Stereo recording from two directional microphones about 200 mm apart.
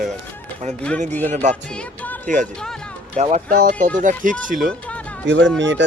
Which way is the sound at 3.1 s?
35° right (ahead or behind).